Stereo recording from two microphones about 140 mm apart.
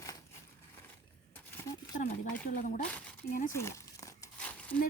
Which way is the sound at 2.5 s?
75° left (ahead or behind).